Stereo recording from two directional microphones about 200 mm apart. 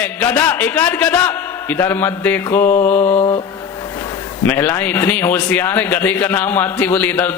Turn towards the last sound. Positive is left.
turn(degrees=10)  # may be behind; listen again after turning